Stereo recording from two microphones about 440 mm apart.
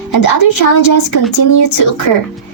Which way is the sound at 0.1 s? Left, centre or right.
Left.